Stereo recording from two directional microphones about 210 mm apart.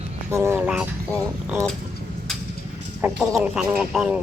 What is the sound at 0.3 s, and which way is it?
Speech, 10° right (ahead or behind).